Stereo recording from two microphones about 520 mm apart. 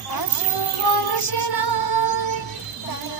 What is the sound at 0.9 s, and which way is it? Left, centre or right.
Music, left.